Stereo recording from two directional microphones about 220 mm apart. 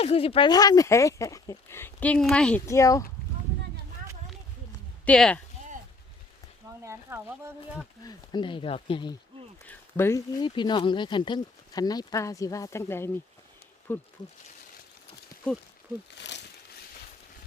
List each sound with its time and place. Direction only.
0.0 s speech: 25° left (ahead or behind)
5.0 s speech: 5° left (ahead or behind)
6.8 s speech: 10° right (ahead or behind)
7.8 s speech: 20° left (ahead or behind)
9.6 s speech: 10° left (ahead or behind)
16.1 s a sound: 50° left (ahead or behind)